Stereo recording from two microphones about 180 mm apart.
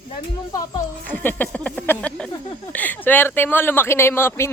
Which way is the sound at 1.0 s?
10° left (ahead or behind).